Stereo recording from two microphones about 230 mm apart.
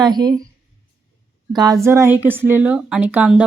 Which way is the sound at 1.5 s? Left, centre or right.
Centre.